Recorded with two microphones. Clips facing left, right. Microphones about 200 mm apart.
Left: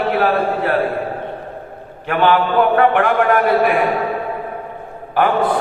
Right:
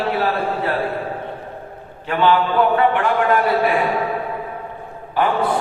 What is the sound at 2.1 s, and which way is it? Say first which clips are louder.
A man's voice: left 2 dB; 55° left (ahead or behind).